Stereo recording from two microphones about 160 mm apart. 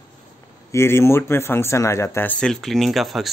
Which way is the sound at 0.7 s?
15° left (ahead or behind).